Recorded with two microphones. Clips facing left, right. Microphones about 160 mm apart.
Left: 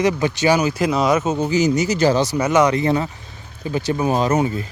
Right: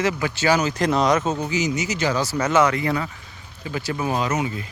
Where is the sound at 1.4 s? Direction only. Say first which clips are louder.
Left 6 dB; 35° left (ahead or behind).